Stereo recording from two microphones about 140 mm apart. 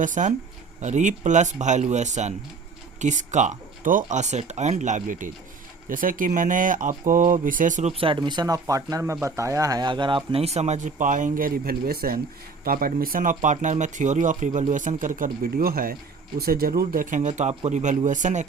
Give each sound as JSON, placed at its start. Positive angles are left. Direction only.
{"t": 0.0, "sound": "speech", "side_deg": -65}
{"t": 7.9, "sound": "speech", "side_deg": -35}